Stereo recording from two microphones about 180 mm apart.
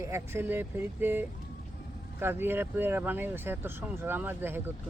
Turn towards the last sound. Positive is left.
turn(degrees=-10)  # may be behind; listen again after turning